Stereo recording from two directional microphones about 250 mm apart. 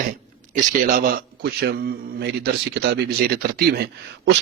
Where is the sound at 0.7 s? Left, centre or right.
Right.